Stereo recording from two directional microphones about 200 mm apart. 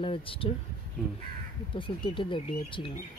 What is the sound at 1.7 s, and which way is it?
Speech, 25° left (ahead or behind).